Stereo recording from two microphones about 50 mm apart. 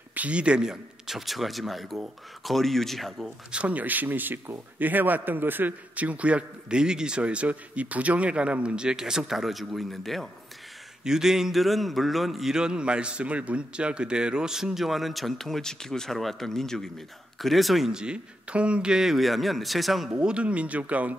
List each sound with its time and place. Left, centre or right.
0.1 s a man's voice: right; by 3.3 s centre
3.5 s a man's voice: right; by 10.3 s centre
11.1 s a man's voice: centre
17.9 s a man's voice: centre
20.1 s a man's voice: right